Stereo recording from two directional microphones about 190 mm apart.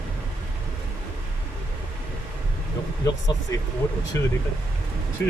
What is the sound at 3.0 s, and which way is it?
Speech, 20° left (ahead or behind).